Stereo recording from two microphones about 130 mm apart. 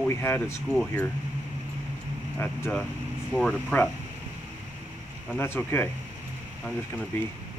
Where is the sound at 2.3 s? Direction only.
15° left (ahead or behind).